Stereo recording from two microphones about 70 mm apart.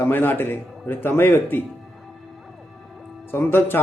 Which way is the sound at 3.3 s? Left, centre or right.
Left.